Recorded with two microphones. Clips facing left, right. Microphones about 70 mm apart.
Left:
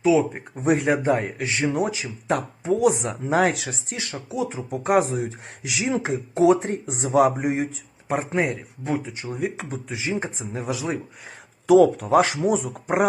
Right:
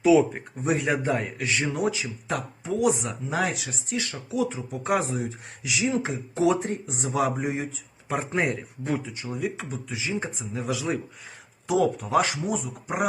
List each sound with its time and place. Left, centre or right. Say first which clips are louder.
0.0 s speech: even; centre
0.6 s speech: left 5 dB; left
3.8 s speech: right 1 dB; left
6.4 s speech: left 5 dB; left
8.0 s speech: left 3 dB; left
8.4 s speech: left 2 dB; centre
9.2 s speech: left 2 dB; left
11.7 s speech: left 8 dB; left
12.0 s speech: left 5 dB; left
12.4 s speech: left 7 dB; left